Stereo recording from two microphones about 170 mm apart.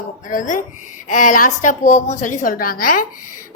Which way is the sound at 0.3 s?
50° left (ahead or behind).